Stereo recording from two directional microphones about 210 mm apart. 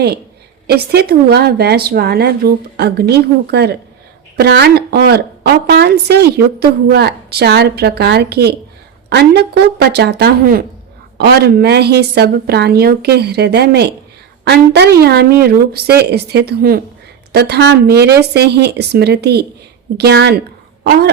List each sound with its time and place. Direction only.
0.7 s a woman's voice: 50° right (ahead or behind)
20.8 s throat clearing: 50° right (ahead or behind)